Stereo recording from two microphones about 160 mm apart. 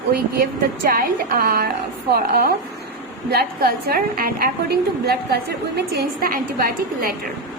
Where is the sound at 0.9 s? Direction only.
65° right (ahead or behind).